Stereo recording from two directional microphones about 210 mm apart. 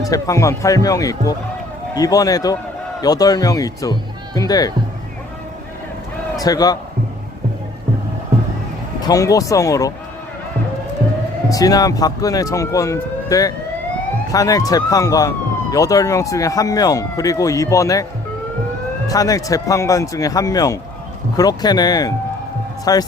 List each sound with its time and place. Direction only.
0.0 s speech: 15° left (ahead or behind)
6.3 s a man's voice: 15° left (ahead or behind)
9.0 s speech: 15° left (ahead or behind)
11.4 s speech: 15° left (ahead or behind)
19.0 s speech: 15° left (ahead or behind)